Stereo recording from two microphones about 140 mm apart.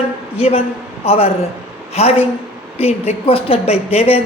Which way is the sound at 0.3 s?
45° left (ahead or behind).